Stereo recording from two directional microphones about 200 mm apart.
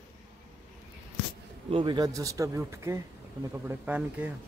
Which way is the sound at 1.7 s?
25° right (ahead or behind).